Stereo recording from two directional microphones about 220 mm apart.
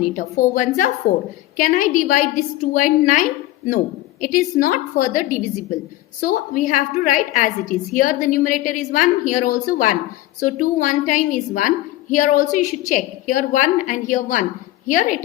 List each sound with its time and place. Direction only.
0.0 s a woman's voice: 35° left (ahead or behind)